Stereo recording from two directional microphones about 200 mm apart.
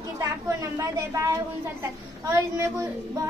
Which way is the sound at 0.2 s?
15° right (ahead or behind).